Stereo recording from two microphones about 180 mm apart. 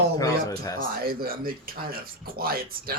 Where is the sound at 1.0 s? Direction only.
55° right (ahead or behind).